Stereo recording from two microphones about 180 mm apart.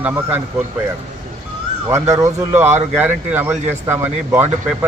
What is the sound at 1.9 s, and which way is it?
Speech, 15° right (ahead or behind).